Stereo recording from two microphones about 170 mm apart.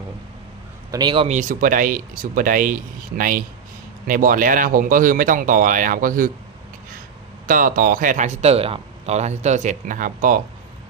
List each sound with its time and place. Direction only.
0.9 s a man's voice: 25° right (ahead or behind)
1.4 s speech: 50° right (ahead or behind)
7.4 s speech: 55° right (ahead or behind)